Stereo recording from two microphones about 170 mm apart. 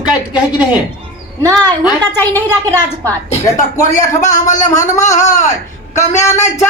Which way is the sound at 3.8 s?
50° left (ahead or behind).